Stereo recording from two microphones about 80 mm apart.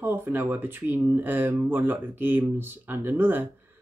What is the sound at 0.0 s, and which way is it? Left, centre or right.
Speech, right.